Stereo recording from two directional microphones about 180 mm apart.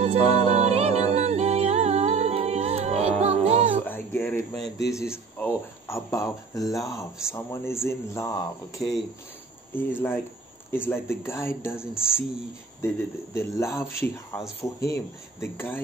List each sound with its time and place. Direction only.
0.0 s music: 40° right (ahead or behind)
3.8 s a sound: 10° left (ahead or behind)
4.6 s speech: 70° left (ahead or behind)
4.9 s speech: 15° left (ahead or behind)